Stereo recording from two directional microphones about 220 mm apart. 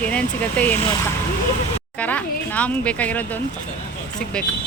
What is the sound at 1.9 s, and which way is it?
Speech, 5° left (ahead or behind).